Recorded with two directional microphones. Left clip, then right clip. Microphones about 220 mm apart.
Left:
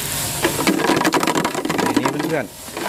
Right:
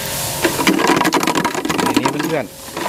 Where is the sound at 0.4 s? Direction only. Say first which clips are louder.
Right 3 dB; 20° right (ahead or behind).